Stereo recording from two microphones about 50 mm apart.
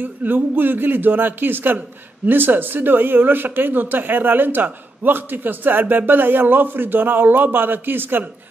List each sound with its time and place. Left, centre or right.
0.0 s speech: right